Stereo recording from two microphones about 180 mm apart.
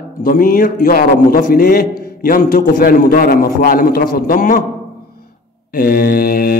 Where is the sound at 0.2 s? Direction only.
50° left (ahead or behind).